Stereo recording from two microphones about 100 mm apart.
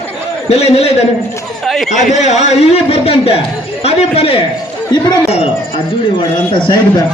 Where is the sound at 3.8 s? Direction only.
90° left.